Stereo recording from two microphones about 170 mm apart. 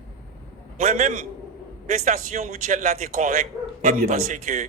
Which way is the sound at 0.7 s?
45° right (ahead or behind).